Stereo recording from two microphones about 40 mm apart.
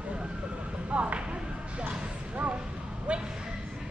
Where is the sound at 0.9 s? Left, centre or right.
Right.